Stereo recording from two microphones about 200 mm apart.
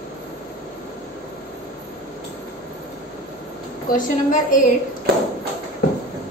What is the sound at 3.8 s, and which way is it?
Speech, 40° left (ahead or behind).